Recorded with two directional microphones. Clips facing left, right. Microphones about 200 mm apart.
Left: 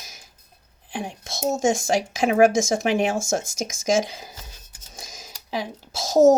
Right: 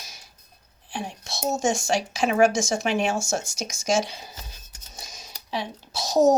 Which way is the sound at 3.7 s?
90° left.